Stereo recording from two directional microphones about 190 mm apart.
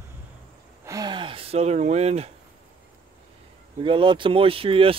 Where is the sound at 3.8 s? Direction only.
25° right (ahead or behind).